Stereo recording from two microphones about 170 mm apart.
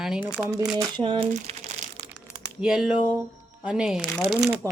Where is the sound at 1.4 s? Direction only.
40° right (ahead or behind).